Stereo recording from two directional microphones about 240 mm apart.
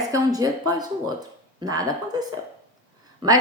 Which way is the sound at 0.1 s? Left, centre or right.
Centre.